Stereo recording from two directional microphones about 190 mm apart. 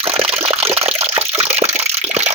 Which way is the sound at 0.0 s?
30° right (ahead or behind).